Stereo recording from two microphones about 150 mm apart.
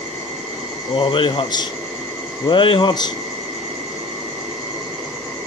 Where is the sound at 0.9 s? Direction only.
35° left (ahead or behind).